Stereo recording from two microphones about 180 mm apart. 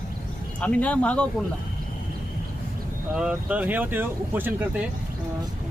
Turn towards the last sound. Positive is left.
turn(degrees=-10)  # may be behind; listen again after turning